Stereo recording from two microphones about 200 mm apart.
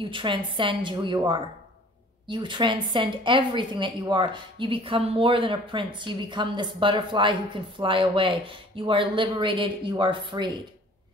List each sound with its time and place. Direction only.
0.0 s speech: 25° right (ahead or behind)